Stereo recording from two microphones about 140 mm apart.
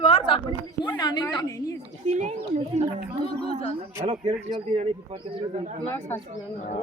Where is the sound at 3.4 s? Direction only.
45° left (ahead or behind).